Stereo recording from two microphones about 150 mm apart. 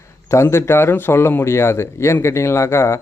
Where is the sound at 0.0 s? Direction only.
20° left (ahead or behind).